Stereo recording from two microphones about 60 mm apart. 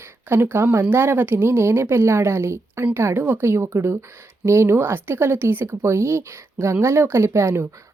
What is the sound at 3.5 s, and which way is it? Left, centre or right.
Speech, right.